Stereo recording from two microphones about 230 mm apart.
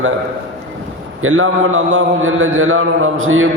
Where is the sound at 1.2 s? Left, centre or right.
Right.